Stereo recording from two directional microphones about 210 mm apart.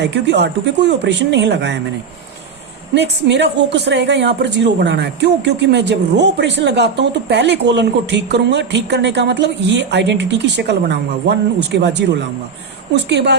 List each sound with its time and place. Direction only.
0.0 s speech: 55° right (ahead or behind)
2.9 s speech: 55° right (ahead or behind)
12.9 s speech: 55° right (ahead or behind)